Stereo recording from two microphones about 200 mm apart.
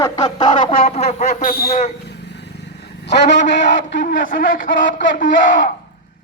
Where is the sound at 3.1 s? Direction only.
60° left (ahead or behind).